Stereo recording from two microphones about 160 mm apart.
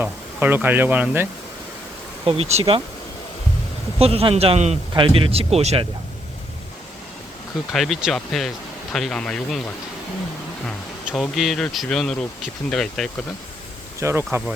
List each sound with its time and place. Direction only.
0.0 s speech: 10° right (ahead or behind)
2.2 s speech: 40° right (ahead or behind)
3.9 s speech: 35° right (ahead or behind)
7.7 s speech: centre (ahead or behind)
14.0 s speech: 15° right (ahead or behind)